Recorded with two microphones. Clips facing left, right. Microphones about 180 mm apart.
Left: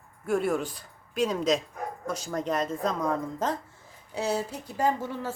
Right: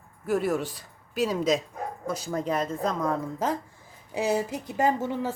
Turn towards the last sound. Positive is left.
turn(degrees=-20)  # may be behind; listen again after turning